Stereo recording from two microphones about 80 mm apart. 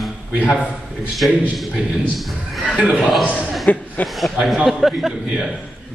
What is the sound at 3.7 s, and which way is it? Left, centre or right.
Speech, left.